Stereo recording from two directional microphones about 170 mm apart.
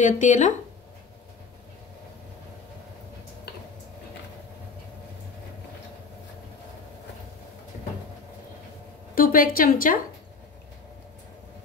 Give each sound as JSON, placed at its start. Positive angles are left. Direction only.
{"t": 0.0, "sound": "speech", "side_deg": 45}
{"t": 9.1, "sound": "a woman's voice", "side_deg": 55}